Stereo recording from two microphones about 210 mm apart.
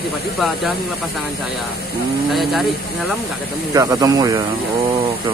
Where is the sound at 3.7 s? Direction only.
15° right (ahead or behind).